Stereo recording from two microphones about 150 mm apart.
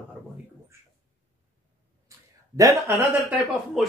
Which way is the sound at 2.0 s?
25° right (ahead or behind).